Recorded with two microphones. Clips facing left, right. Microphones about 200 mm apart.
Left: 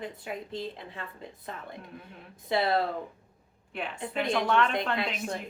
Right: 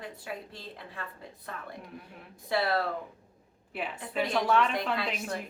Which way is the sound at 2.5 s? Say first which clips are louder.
Left 2 dB; 20° left (ahead or behind).